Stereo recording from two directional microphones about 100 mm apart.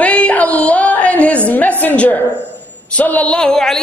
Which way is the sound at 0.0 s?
15° left (ahead or behind).